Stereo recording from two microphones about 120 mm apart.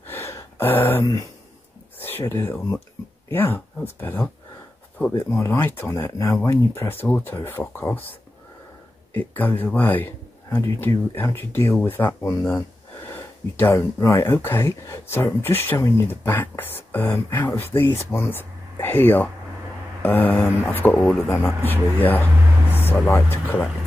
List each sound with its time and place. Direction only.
0.1 s a sound: 25° left (ahead or behind)
1.0 s speech: 30° left (ahead or behind)
2.0 s speech: 20° left (ahead or behind)
9.1 s speech: 15° left (ahead or behind)
22.8 s music: 15° left (ahead or behind)
23.1 s speech: 15° left (ahead or behind)